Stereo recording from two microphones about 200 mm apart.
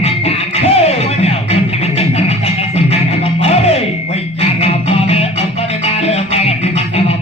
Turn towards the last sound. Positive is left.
turn(degrees=30)  # may be behind; listen again after turning